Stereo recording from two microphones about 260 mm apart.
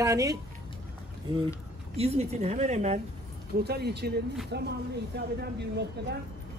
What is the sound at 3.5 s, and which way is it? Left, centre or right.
Speech, right.